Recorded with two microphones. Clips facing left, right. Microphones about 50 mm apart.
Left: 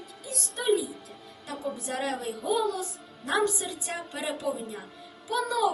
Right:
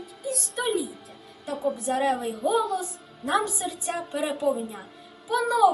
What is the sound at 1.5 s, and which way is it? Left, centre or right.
A woman's voice, centre.